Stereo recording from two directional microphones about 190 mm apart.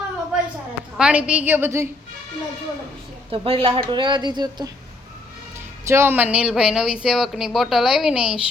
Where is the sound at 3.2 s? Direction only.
30° right (ahead or behind).